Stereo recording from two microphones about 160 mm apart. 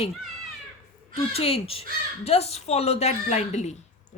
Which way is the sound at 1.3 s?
40° left (ahead or behind).